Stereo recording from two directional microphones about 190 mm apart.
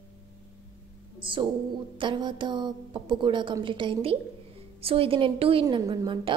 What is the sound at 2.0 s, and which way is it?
A woman's voice, 25° right (ahead or behind).